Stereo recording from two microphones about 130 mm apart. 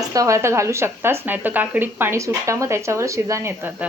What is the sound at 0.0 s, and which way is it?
A woman's voice, 25° right (ahead or behind).